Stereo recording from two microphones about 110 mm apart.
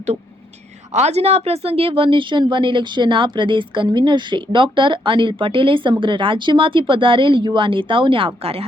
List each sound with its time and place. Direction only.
0.9 s speech: 75° right (ahead or behind); by 8.6 s 60° right (ahead or behind)